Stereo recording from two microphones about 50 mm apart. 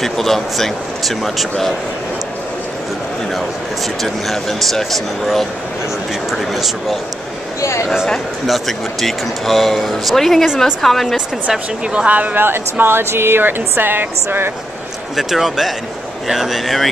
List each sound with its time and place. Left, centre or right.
0.0 s speech: centre
4.0 s speech: centre
8.5 s speech: centre
11.9 s speech: right
12.4 s a woman's voice: right
15.1 s speech: centre